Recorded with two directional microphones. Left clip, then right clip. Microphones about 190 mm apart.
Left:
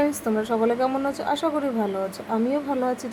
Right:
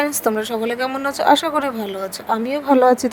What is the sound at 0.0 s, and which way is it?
A woman's voice, 50° right (ahead or behind).